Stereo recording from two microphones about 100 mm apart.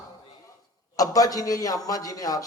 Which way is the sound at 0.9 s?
35° left (ahead or behind).